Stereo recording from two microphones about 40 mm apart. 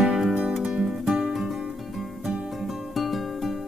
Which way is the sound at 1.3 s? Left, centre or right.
Centre.